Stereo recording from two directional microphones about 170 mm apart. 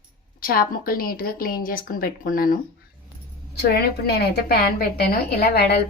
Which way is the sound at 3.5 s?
75° left (ahead or behind).